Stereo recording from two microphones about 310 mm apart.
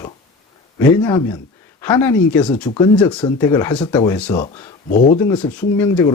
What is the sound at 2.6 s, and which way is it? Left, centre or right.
Speech, centre.